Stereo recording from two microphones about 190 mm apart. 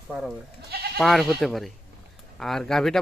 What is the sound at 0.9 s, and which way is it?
Speech, centre (ahead or behind).